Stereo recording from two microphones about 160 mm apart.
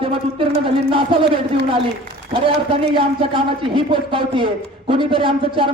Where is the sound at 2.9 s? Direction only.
35° right (ahead or behind).